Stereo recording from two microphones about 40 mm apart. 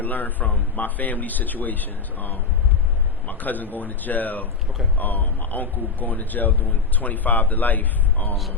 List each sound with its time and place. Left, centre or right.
0.0 s a man's voice: left